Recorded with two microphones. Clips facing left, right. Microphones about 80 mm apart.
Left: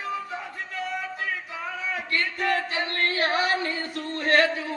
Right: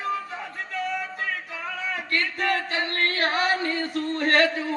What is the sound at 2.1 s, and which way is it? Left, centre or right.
Speech, right.